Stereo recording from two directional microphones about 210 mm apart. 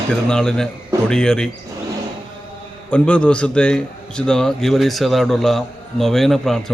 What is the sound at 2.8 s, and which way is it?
A man's voice, 5° left (ahead or behind).